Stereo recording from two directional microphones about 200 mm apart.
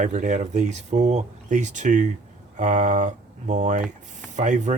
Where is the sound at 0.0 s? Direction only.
40° right (ahead or behind).